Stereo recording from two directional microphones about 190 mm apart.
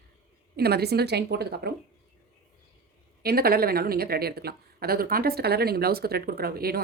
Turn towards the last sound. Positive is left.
turn(degrees=-50)  # may be behind; listen again after turning